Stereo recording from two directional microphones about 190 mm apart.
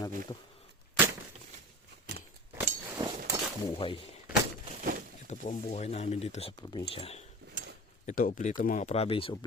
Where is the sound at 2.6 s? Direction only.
20° right (ahead or behind).